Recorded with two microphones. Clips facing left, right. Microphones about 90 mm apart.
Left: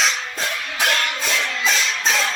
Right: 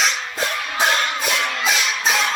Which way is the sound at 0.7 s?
20° right (ahead or behind).